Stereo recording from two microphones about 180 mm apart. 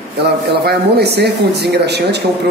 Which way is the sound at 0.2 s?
65° right (ahead or behind).